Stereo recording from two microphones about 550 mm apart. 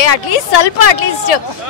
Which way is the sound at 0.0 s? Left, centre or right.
Left.